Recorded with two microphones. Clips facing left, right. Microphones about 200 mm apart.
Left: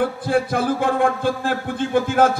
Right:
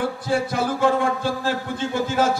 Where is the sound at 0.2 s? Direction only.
55° left (ahead or behind).